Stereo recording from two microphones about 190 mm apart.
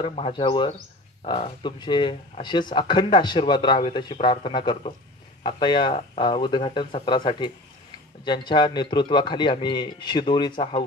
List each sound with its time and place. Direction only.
0.0 s speech: 30° left (ahead or behind)